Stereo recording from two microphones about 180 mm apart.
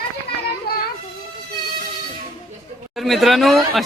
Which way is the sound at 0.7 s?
60° left (ahead or behind).